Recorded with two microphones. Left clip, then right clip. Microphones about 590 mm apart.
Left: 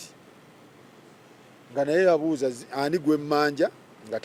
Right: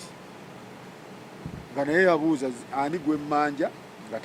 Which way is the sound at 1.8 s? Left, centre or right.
Centre.